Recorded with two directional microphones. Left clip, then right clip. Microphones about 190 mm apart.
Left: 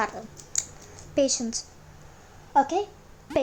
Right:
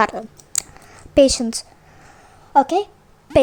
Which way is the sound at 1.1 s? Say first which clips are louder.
Right 10 dB; 40° right (ahead or behind).